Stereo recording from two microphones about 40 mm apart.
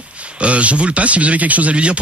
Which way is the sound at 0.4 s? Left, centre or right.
Right.